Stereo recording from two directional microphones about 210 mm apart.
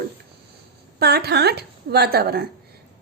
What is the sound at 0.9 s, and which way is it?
A woman's voice, 50° right (ahead or behind).